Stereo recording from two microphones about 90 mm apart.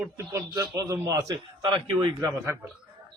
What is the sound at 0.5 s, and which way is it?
Speech, 45° right (ahead or behind).